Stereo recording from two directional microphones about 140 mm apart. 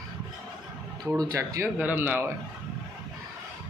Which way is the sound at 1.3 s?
20° right (ahead or behind).